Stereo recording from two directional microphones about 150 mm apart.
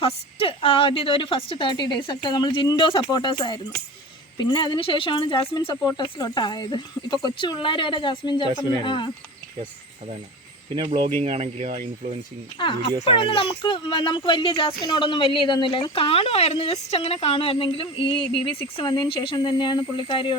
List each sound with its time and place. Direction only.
0.0 s speech: 40° left (ahead or behind)
5.7 s speech: 20° left (ahead or behind)
10.8 s speech: 30° right (ahead or behind)
13.1 s speech: 35° left (ahead or behind)